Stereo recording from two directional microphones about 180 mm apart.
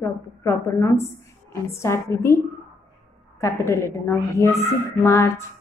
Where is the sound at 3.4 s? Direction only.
15° left (ahead or behind).